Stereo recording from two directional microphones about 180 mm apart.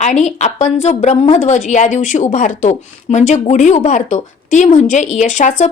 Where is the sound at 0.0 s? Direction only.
40° left (ahead or behind).